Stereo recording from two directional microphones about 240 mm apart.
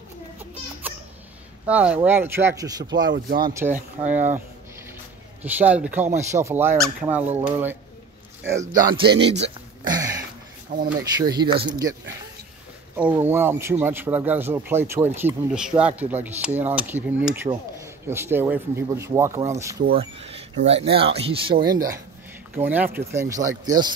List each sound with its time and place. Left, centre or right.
1.7 s a man's voice: centre
5.4 s a man's voice: centre
9.0 s speech: right
9.8 s a sound: centre
10.7 s speech: right
11.0 s a man's voice: centre
12.9 s a man's voice: centre
20.0 s a man's voice: right